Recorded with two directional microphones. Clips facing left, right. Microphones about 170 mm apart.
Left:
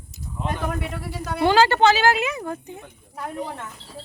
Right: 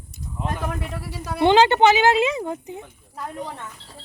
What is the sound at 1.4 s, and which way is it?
Speech, 20° right (ahead or behind).